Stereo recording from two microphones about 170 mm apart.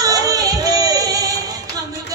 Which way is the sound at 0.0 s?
20° right (ahead or behind).